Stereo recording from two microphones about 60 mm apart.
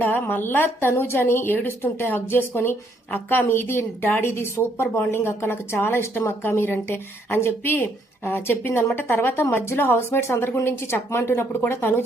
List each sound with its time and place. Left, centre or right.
0.0 s speech: left